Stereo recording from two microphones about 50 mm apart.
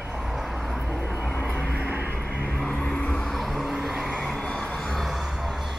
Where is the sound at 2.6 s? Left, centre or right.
Left.